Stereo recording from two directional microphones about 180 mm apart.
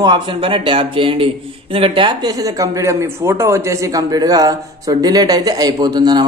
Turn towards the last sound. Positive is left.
turn(degrees=-25)  # may be behind; listen again after turning